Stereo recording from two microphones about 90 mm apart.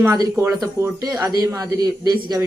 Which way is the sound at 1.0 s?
40° right (ahead or behind).